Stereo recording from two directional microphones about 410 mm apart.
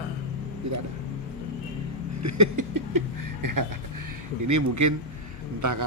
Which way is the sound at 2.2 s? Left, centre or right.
Right.